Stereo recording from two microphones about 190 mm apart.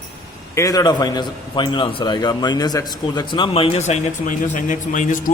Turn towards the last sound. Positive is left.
turn(degrees=40)  # may be behind; listen again after turning